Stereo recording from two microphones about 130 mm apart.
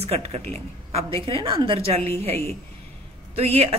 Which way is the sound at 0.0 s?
50° right (ahead or behind).